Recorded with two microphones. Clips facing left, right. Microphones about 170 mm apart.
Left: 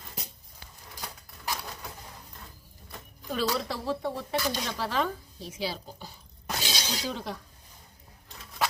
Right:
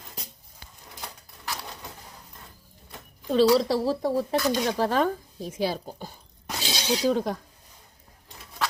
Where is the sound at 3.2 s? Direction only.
35° right (ahead or behind).